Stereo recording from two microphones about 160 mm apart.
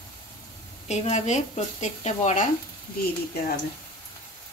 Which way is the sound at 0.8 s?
45° left (ahead or behind).